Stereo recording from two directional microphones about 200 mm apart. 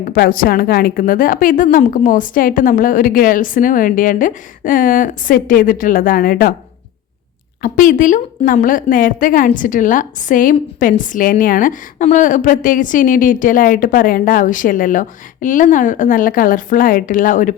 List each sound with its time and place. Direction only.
0.0 s a woman's voice: 45° left (ahead or behind)
7.6 s a woman's voice: 45° left (ahead or behind)